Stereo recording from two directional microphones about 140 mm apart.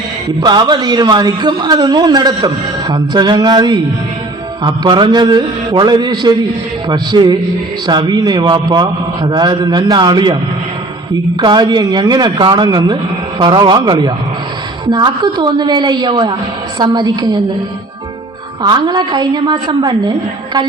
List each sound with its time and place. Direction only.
0.4 s a man's voice: 30° right (ahead or behind)
11.3 s a man's voice: 30° right (ahead or behind)
18.6 s a man's voice: 30° right (ahead or behind)